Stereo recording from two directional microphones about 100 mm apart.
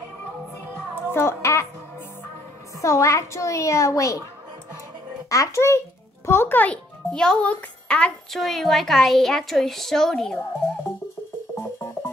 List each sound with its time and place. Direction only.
1.1 s a sound: 25° left (ahead or behind)
2.8 s a woman's voice: 30° left (ahead or behind)
5.3 s a child's voice: 30° left (ahead or behind); by 10.4 s 5° left (ahead or behind)
11.5 s music: 25° left (ahead or behind)